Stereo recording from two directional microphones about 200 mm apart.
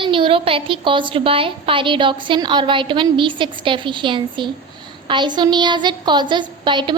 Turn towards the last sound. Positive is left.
turn(degrees=-25)  # may be behind; listen again after turning